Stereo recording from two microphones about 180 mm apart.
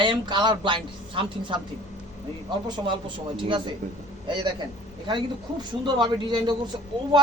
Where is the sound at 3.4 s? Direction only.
25° right (ahead or behind).